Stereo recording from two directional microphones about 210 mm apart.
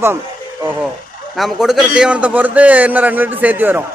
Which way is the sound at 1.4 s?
Centre (ahead or behind).